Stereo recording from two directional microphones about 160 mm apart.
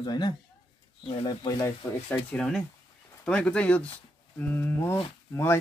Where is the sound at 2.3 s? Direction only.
5° left (ahead or behind).